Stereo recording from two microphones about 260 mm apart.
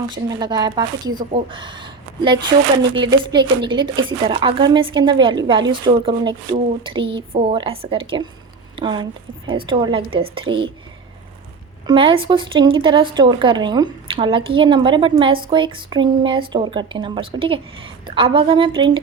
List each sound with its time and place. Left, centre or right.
0.1 s a woman's voice: centre
11.9 s a woman's voice: centre